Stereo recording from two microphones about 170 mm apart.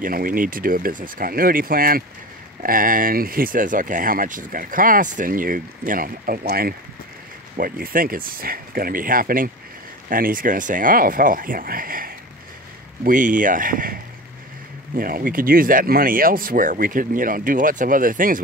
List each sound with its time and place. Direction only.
0.0 s speech: 55° right (ahead or behind)
15.0 s speech: 55° right (ahead or behind)